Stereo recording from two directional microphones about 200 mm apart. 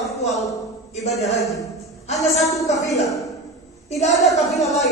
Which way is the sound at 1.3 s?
Centre (ahead or behind).